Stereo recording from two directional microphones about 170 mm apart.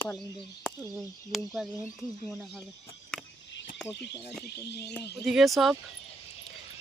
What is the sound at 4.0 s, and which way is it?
Speech, 80° left.